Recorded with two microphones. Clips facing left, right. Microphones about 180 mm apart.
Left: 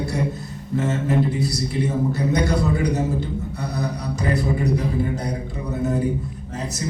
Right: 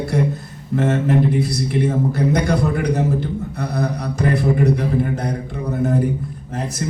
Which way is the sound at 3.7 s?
55° right (ahead or behind).